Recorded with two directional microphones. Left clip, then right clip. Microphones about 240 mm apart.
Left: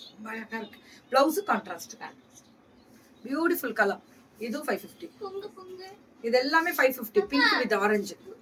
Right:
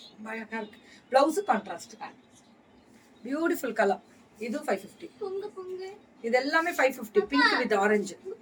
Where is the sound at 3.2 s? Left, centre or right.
Centre.